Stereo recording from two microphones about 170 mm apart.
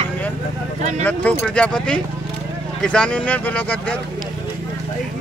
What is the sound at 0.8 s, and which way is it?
Speech, 40° right (ahead or behind).